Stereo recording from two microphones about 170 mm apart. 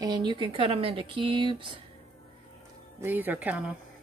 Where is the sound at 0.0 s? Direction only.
25° right (ahead or behind).